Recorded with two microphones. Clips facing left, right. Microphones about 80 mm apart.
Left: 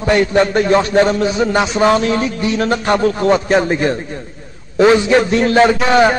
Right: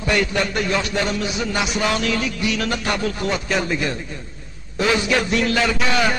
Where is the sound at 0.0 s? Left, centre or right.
Left.